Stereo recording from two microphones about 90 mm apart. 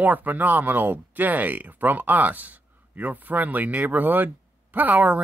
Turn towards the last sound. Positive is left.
turn(degrees=-20)  # may be behind; listen again after turning